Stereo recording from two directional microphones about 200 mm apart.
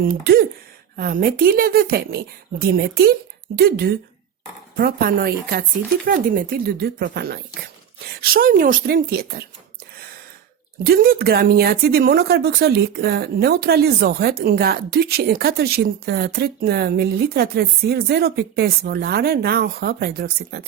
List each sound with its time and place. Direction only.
0.0 s speech: 45° right (ahead or behind)
10.8 s speech: 50° right (ahead or behind)